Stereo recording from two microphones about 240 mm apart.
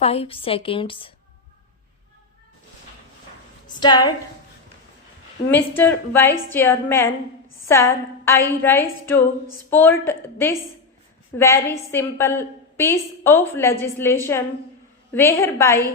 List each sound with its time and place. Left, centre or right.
0.0 s a woman's voice: left
3.8 s a woman's voice: centre
5.5 s a woman's voice: centre